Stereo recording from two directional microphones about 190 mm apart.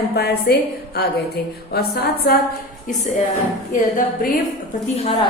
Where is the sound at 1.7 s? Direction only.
55° left (ahead or behind).